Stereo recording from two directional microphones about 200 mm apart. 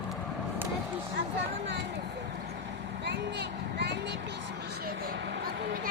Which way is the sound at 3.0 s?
60° right (ahead or behind).